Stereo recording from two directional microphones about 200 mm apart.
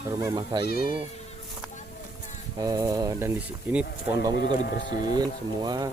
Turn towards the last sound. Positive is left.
turn(degrees=-20)  # may be behind; listen again after turning